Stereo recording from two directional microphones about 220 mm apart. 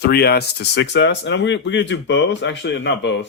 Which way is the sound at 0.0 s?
45° left (ahead or behind).